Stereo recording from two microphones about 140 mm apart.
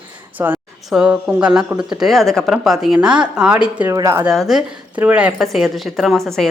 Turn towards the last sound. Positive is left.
turn(degrees=0)  # may be behind; listen again after turning